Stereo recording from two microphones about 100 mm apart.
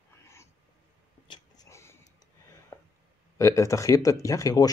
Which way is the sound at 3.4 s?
30° left (ahead or behind).